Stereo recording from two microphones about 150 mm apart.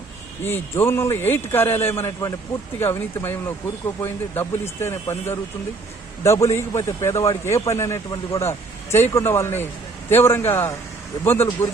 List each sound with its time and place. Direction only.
0.4 s a man's voice: 15° left (ahead or behind)